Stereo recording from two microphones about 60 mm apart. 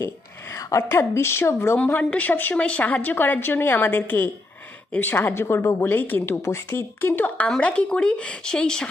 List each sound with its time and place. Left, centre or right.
0.0 s a sound: left
0.8 s a woman's voice: left
2.0 s a woman's voice: left
6.2 s a woman's voice: left
7.2 s speech: left
7.4 s a woman's voice: centre